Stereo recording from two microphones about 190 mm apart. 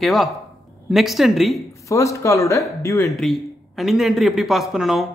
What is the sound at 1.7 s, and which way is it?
Speech, 15° left (ahead or behind).